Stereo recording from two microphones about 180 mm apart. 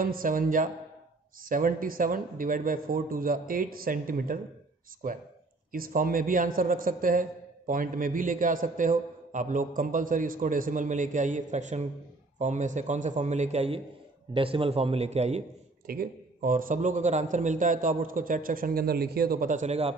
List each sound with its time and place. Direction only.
0.0 s a man's voice: 50° right (ahead or behind)
15.9 s a man's voice: 55° right (ahead or behind); by 19.9 s 40° right (ahead or behind)